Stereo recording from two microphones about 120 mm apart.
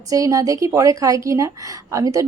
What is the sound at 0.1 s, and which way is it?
A woman's voice, 30° right (ahead or behind).